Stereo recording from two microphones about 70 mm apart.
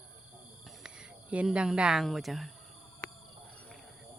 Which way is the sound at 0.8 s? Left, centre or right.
Centre.